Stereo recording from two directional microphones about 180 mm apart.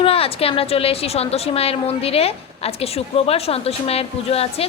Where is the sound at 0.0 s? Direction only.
30° left (ahead or behind).